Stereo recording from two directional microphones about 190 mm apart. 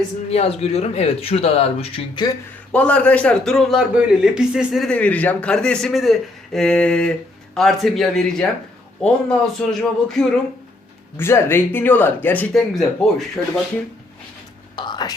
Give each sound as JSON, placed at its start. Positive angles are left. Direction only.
{"t": 0.3, "sound": "speech", "side_deg": 35}
{"t": 2.7, "sound": "a man's voice", "side_deg": 5}
{"t": 11.2, "sound": "speech", "side_deg": 15}
{"t": 14.8, "sound": "whispering", "side_deg": 25}